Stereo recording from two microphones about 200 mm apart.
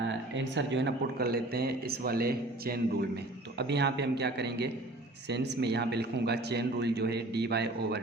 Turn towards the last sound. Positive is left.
turn(degrees=-55)  # may be behind; listen again after turning